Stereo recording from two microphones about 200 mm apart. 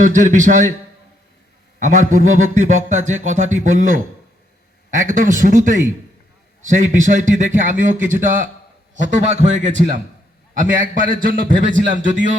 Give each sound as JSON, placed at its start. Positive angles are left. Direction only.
{"t": 0.0, "sound": "a man's voice", "side_deg": -40}
{"t": 1.8, "sound": "a man's voice", "side_deg": -40}